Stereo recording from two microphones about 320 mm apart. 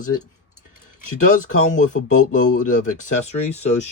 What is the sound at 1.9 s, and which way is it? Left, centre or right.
Speech, left.